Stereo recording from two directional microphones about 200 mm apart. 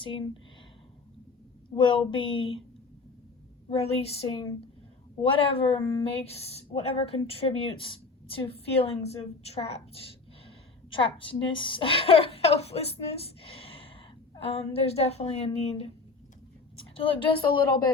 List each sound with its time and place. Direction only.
0.0 s a woman's voice: 25° left (ahead or behind)
1.7 s a woman's voice: 25° left (ahead or behind)
3.7 s a woman's voice: 30° left (ahead or behind)
16.7 s a sound: 25° left (ahead or behind)